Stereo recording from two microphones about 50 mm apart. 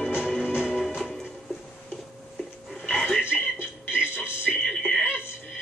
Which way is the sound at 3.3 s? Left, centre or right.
Centre.